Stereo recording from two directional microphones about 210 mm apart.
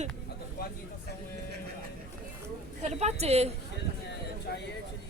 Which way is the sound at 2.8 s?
30° right (ahead or behind).